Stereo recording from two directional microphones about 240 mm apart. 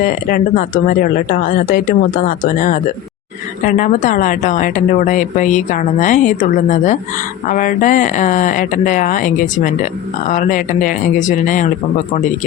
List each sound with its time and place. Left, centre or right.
0.0 s speech: left